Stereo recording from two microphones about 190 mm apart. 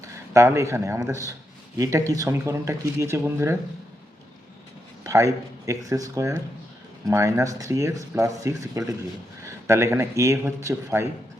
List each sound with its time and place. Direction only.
0.0 s speech: 15° right (ahead or behind)
5.0 s speech: 15° right (ahead or behind)